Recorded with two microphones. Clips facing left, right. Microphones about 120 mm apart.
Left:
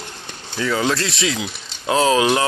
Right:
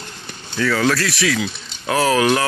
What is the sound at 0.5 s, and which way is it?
Speech, 20° left (ahead or behind).